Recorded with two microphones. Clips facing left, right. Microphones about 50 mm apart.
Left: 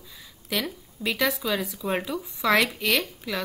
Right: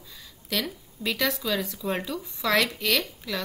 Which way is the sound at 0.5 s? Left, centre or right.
Centre.